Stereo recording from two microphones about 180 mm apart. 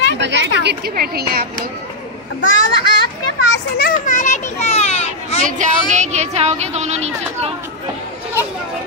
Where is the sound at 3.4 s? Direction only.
60° left (ahead or behind); by 5.4 s 35° left (ahead or behind).